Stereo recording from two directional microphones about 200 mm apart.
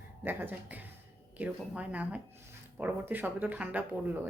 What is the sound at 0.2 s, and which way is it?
Speech, 10° right (ahead or behind).